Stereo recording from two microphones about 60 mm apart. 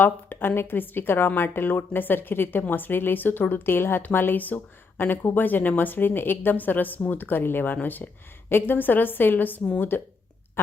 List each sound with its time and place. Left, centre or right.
0.0 s speech: left